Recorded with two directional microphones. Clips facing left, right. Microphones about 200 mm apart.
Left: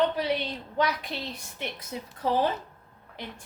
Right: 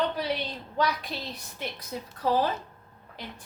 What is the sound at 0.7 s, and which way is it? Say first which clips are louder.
A woman's voice: even; 20° left (ahead or behind).